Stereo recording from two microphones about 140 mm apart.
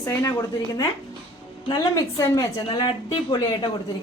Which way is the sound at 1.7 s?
25° left (ahead or behind).